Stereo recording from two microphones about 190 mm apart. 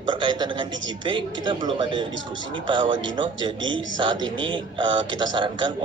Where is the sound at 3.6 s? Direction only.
85° right.